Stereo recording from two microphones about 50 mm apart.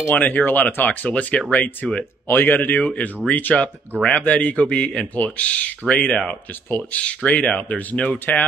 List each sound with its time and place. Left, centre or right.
0.1 s speech: left
1.0 s speech: left